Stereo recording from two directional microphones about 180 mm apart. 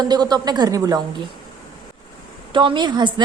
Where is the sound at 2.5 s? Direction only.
25° right (ahead or behind).